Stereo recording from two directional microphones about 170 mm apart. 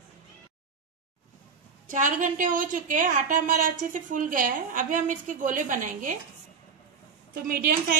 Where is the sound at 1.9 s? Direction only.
50° right (ahead or behind).